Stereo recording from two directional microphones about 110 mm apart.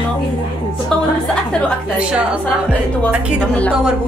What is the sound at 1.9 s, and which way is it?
Speech, 10° right (ahead or behind).